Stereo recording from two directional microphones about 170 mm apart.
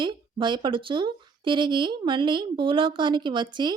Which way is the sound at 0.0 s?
30° right (ahead or behind).